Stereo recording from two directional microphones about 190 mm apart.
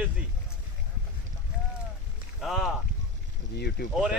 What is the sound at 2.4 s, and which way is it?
Speech, centre (ahead or behind).